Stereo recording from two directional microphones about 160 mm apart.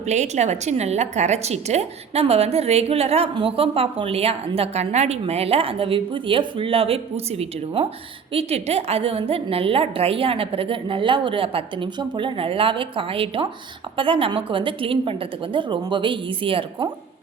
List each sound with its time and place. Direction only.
0.1 s a woman's voice: 45° right (ahead or behind)